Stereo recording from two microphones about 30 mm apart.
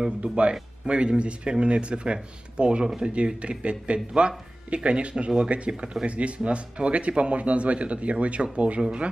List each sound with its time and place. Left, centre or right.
0.2 s speech: right